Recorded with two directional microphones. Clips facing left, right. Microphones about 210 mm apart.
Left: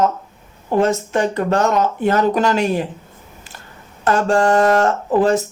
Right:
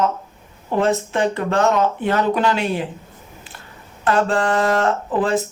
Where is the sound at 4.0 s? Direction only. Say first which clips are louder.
Left 3 dB; 45° left (ahead or behind).